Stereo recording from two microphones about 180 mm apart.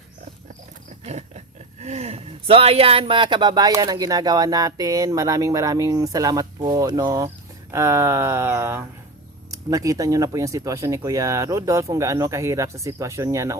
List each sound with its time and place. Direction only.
1.8 s speech: 40° right (ahead or behind); by 13.6 s 15° right (ahead or behind)